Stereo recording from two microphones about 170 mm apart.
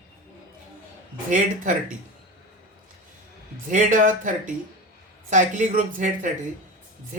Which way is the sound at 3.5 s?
50° right (ahead or behind).